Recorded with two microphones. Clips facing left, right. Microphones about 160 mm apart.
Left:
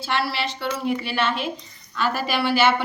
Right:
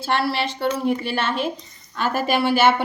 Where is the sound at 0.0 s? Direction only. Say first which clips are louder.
Right 3 dB; 50° right (ahead or behind).